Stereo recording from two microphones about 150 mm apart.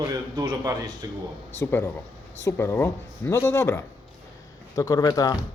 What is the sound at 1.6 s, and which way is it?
Speech, 15° left (ahead or behind).